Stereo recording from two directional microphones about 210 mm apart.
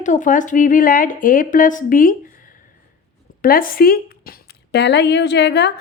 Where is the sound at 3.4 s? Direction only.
45° left (ahead or behind).